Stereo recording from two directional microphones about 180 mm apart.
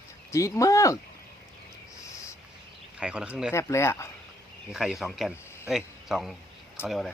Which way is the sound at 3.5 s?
15° left (ahead or behind).